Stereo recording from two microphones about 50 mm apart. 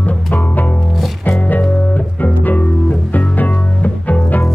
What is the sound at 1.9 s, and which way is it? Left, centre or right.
Music, left.